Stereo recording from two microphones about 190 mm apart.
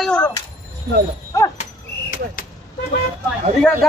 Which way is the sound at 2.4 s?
45° left (ahead or behind).